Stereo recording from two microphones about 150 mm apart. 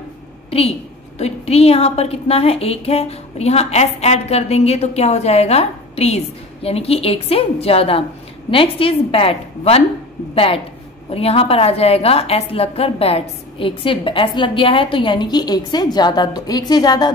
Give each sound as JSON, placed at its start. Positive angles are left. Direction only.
{"t": 0.5, "sound": "a woman's voice", "side_deg": 40}